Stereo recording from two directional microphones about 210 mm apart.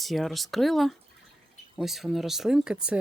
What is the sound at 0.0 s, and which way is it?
Speech, centre (ahead or behind).